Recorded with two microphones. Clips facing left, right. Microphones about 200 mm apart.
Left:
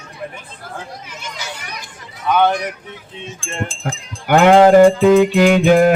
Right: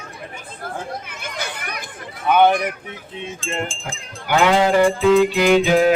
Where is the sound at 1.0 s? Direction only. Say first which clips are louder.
Right 1 dB; 55° right (ahead or behind).